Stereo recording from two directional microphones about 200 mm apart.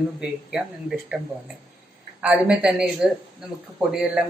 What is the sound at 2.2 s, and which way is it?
Speech, 5° right (ahead or behind).